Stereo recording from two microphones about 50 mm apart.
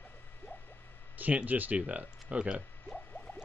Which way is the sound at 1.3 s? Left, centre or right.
Right.